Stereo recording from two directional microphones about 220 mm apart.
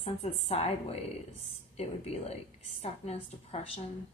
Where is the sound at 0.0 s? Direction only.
30° left (ahead or behind).